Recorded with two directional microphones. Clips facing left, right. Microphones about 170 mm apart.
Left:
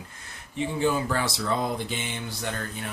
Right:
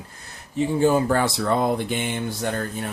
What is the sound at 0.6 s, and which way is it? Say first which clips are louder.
Speech: right 6 dB; 45° right (ahead or behind).